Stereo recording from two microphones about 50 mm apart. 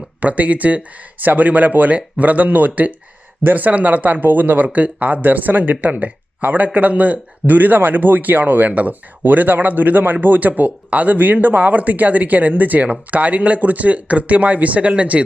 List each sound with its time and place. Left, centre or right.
0.2 s speech: right